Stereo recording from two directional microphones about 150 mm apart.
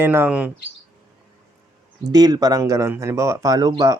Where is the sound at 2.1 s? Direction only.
25° right (ahead or behind).